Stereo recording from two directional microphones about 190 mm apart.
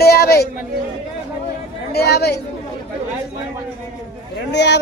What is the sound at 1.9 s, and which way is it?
Speech, 55° left (ahead or behind).